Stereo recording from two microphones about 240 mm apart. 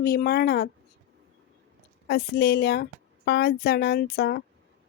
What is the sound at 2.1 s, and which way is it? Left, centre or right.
A woman's voice, left.